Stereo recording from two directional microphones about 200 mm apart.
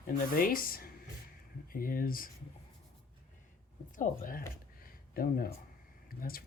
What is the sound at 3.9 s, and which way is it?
Speech, 45° left (ahead or behind).